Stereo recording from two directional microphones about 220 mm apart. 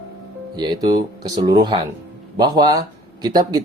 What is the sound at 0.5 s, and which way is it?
Speech, 20° right (ahead or behind).